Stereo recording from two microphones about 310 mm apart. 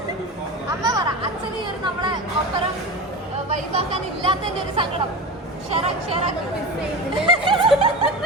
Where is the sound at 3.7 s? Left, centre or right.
Centre.